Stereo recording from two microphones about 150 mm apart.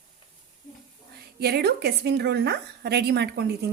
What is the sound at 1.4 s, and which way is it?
A woman's voice, 90° right.